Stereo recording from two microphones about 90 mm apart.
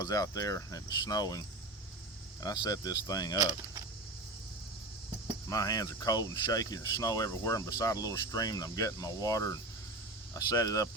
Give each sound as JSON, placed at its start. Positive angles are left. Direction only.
{"t": 0.0, "sound": "speech", "side_deg": 45}
{"t": 5.5, "sound": "speech", "side_deg": 40}